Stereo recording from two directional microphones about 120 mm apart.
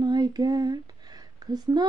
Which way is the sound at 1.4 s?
35° right (ahead or behind).